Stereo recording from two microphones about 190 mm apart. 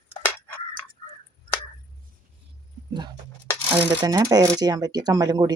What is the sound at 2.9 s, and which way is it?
Speech, 25° right (ahead or behind).